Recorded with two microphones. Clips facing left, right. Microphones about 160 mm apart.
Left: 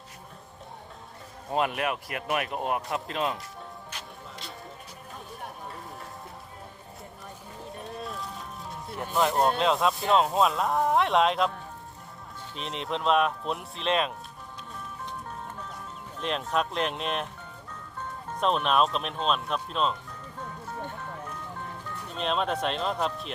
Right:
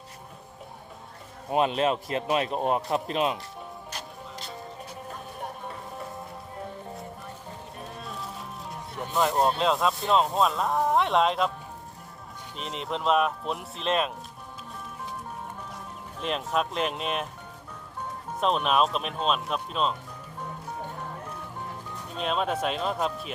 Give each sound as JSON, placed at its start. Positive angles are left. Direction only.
{"t": 1.5, "sound": "speech", "side_deg": -20}
{"t": 8.0, "sound": "music", "side_deg": 0}
{"t": 9.4, "sound": "speech", "side_deg": 0}
{"t": 12.5, "sound": "speech", "side_deg": 0}
{"t": 16.2, "sound": "speech", "side_deg": 0}
{"t": 18.3, "sound": "speech", "side_deg": 0}
{"t": 22.1, "sound": "speech", "side_deg": -5}